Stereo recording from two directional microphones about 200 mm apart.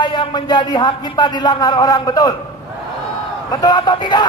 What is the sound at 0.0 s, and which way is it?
Speech, 25° left (ahead or behind).